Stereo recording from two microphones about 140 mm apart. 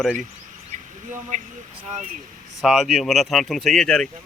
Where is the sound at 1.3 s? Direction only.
65° right (ahead or behind).